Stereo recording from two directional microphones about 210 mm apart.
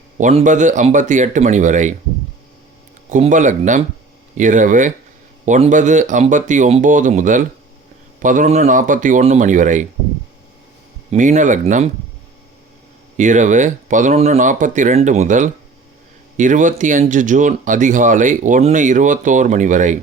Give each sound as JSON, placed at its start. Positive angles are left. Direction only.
{"t": 0.2, "sound": "speech", "side_deg": -35}
{"t": 3.1, "sound": "speech", "side_deg": -35}
{"t": 11.1, "sound": "speech", "side_deg": -35}
{"t": 13.1, "sound": "speech", "side_deg": -35}